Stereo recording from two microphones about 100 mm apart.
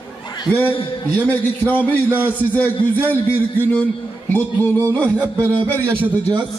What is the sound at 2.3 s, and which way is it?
A man's voice, 15° left (ahead or behind).